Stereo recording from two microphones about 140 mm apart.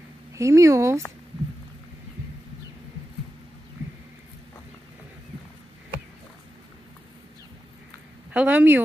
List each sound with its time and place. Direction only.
0.4 s speech: 20° right (ahead or behind)
8.3 s speech: 10° right (ahead or behind)